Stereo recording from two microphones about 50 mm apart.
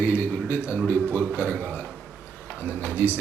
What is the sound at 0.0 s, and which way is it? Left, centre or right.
Speech, left.